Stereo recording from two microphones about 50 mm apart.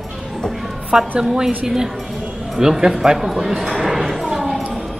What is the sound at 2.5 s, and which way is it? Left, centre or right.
Speech, centre.